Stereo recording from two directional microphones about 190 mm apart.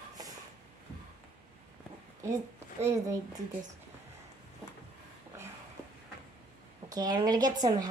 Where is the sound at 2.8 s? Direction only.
15° right (ahead or behind).